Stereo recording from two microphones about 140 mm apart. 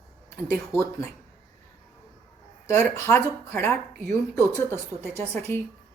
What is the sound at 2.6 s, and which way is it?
Speech, 20° left (ahead or behind).